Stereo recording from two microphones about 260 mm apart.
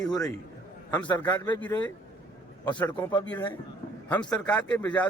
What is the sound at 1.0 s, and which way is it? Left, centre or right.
A man's voice, centre.